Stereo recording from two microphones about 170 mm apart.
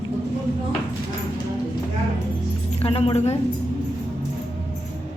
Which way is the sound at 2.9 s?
35° left (ahead or behind).